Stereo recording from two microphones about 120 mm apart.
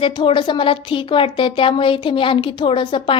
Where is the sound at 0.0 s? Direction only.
45° left (ahead or behind).